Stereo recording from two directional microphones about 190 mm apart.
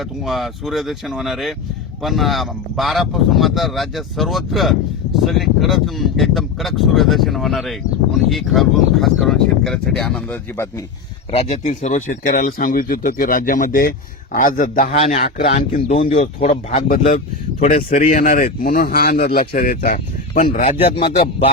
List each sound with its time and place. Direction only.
0.0 s speech: centre (ahead or behind)
11.3 s a man's voice: 35° left (ahead or behind)
17.6 s speech: 45° left (ahead or behind)
20.7 s a man's voice: 30° left (ahead or behind)